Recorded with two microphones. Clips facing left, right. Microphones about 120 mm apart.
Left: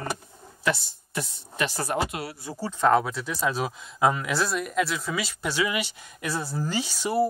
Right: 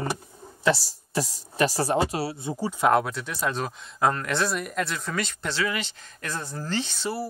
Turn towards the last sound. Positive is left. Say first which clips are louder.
# left 3 dB
turn(degrees=10)  # may be behind; listen again after turning